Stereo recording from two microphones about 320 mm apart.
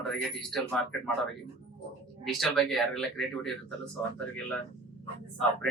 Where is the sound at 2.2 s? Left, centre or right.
Centre.